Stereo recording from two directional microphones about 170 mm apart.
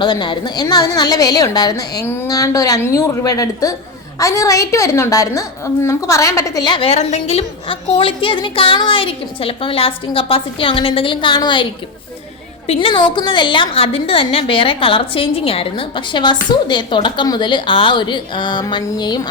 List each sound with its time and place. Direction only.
0.0 s a woman's voice: 25° left (ahead or behind)